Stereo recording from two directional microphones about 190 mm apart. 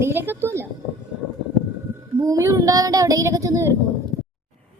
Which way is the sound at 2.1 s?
15° right (ahead or behind).